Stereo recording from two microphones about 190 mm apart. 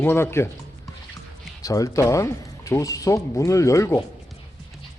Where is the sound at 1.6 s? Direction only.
20° left (ahead or behind).